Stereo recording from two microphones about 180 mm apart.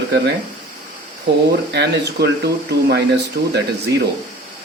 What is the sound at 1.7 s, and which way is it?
Speech, 70° right (ahead or behind).